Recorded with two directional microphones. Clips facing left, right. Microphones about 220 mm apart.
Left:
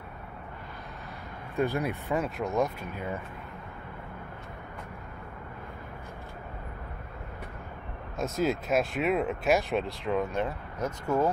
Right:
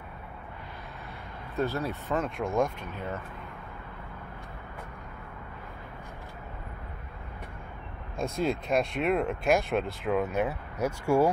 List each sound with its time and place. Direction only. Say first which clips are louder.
1.6 s speech: left 2 dB; 15° left (ahead or behind)
8.2 s speech: left 1 dB; 5° left (ahead or behind)